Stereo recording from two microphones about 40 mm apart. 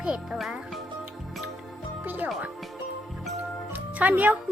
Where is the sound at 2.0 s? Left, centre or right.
Right.